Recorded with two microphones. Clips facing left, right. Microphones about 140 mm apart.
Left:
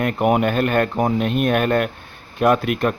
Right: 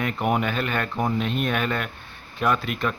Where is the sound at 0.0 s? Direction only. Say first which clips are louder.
Left 6 dB; 55° left (ahead or behind).